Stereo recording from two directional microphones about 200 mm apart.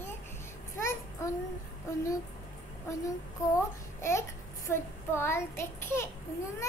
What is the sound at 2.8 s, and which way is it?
A child's voice, 15° left (ahead or behind).